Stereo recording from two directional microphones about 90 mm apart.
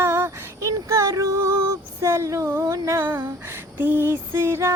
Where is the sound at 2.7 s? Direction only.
30° right (ahead or behind).